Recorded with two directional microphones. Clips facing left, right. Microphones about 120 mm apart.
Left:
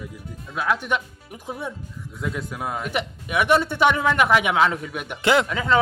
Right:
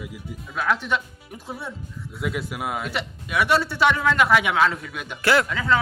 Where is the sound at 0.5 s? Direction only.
5° left (ahead or behind).